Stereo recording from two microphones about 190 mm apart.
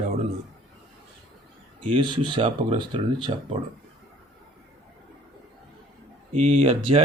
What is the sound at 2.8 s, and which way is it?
Speech, 25° right (ahead or behind).